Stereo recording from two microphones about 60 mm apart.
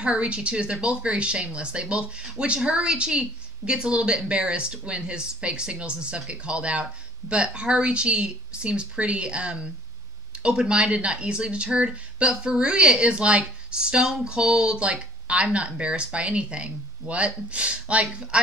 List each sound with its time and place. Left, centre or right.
0.0 s speech: centre